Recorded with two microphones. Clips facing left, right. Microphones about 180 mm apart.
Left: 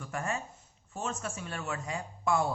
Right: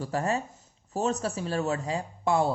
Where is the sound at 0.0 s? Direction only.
35° right (ahead or behind).